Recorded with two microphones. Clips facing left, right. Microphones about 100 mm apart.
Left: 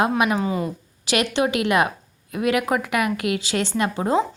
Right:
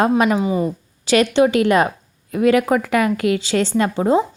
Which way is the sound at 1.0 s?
30° right (ahead or behind).